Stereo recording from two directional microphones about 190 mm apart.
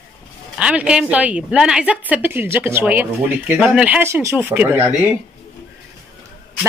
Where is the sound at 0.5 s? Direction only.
5° right (ahead or behind).